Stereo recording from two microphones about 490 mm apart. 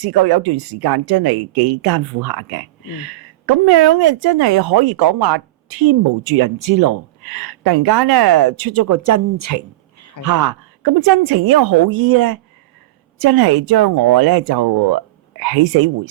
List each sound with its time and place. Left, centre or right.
0.0 s speech: right